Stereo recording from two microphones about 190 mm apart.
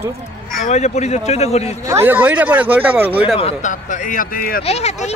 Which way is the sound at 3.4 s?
35° left (ahead or behind).